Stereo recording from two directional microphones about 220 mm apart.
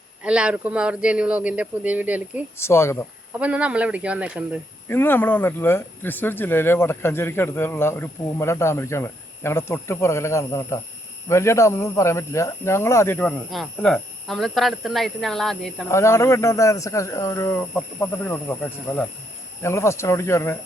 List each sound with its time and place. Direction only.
0.2 s speech: 5° right (ahead or behind)
2.6 s speech: 10° left (ahead or behind)
3.3 s speech: 5° right (ahead or behind)
4.9 s speech: 10° left (ahead or behind)
15.9 s speech: 10° left (ahead or behind)
19.6 s speech: 10° left (ahead or behind)